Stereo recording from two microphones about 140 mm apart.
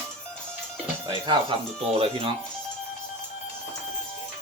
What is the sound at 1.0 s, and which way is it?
Speech, 30° right (ahead or behind).